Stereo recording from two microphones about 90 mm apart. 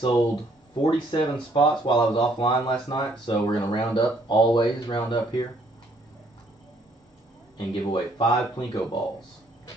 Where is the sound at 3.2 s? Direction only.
60° left (ahead or behind).